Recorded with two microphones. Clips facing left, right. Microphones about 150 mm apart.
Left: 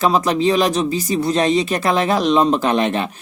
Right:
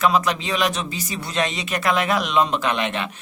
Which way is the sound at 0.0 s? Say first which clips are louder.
Left 4 dB; 35° left (ahead or behind).